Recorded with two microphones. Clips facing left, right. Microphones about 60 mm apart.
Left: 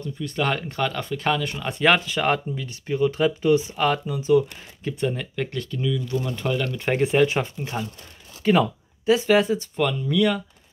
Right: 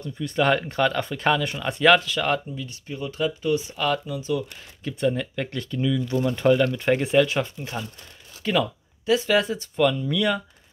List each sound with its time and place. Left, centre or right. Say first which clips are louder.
0.0 s speech: right 3 dB; centre
1.6 s speech: right 3 dB; centre; by 2.4 s left
2.5 s speech: left 6 dB; left; by 4.9 s centre
5.0 s speech: right 2 dB; centre
7.2 s speech: even; centre